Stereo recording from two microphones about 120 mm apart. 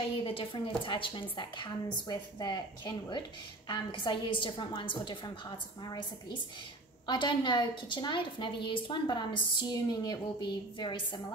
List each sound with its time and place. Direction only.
0.2 s a woman's voice: 50° left (ahead or behind)